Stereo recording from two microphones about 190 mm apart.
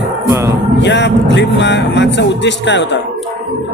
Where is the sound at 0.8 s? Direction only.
70° left (ahead or behind).